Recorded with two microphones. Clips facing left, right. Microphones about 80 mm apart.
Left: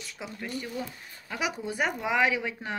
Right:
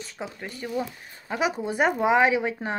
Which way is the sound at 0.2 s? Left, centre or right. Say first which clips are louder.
Right 1 dB; right.